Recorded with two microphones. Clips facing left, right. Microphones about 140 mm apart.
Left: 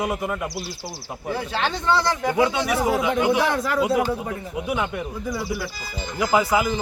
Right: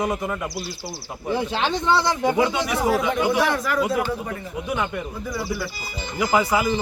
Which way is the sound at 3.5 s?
25° left (ahead or behind).